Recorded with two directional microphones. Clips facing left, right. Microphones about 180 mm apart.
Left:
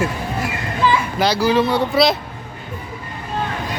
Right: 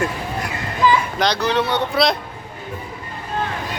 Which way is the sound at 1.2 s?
5° left (ahead or behind).